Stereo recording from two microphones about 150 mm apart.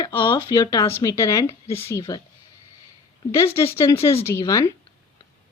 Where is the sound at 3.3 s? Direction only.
15° left (ahead or behind).